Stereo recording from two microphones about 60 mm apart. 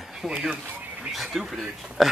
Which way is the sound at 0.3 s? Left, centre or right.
Centre.